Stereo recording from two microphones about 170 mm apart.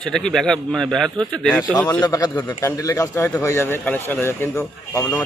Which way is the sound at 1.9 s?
20° left (ahead or behind).